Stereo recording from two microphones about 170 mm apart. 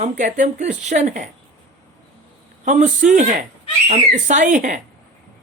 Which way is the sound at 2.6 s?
45° right (ahead or behind).